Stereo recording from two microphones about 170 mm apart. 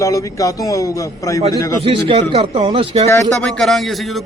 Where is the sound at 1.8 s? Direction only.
35° right (ahead or behind).